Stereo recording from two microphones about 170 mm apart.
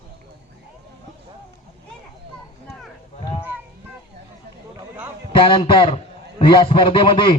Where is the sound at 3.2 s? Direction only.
30° left (ahead or behind).